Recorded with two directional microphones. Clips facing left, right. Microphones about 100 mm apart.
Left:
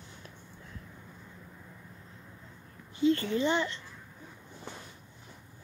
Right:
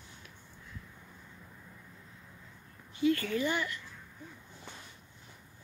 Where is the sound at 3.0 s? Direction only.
25° left (ahead or behind).